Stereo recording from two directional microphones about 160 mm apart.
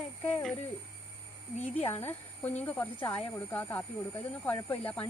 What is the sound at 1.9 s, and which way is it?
Speech, 15° left (ahead or behind).